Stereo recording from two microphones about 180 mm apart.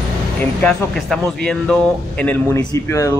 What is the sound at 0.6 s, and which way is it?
Speech, 5° left (ahead or behind).